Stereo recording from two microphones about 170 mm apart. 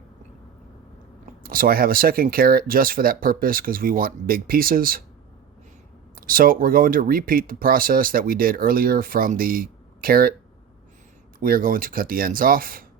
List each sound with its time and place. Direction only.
1.5 s speech: 60° right (ahead or behind)
6.1 s speech: 55° right (ahead or behind)
11.3 s speech: 55° right (ahead or behind)